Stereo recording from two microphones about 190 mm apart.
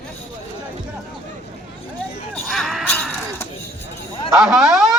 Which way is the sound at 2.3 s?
Centre (ahead or behind).